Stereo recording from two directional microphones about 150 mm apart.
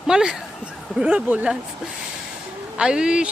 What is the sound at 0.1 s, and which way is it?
Speech, 5° right (ahead or behind).